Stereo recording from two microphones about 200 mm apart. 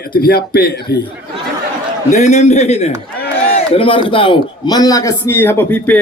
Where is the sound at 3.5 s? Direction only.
25° left (ahead or behind).